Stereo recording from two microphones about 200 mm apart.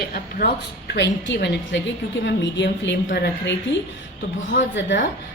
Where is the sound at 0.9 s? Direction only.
60° left (ahead or behind).